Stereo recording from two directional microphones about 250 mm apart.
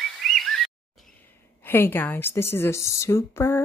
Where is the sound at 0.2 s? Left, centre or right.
Centre.